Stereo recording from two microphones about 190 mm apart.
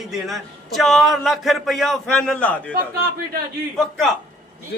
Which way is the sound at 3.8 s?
Centre (ahead or behind).